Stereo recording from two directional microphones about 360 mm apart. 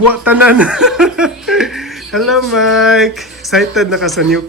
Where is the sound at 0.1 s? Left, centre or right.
Centre.